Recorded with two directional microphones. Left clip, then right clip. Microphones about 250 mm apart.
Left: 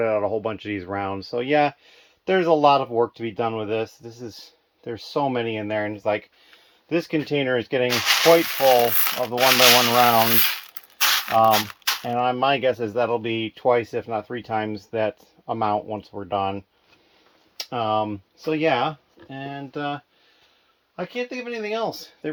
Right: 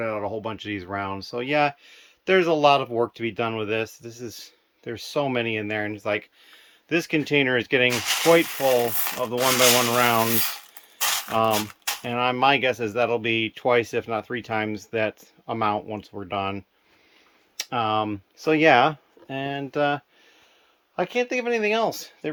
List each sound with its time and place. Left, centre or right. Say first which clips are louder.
0.0 s speech: left 6 dB; centre
7.9 s speech: left 4 dB; centre
8.8 s speech: left 4 dB; centre
10.9 s a sound: left 5 dB; centre
12.0 s speech: right 1 dB; centre
17.7 s speech: left 1 dB; centre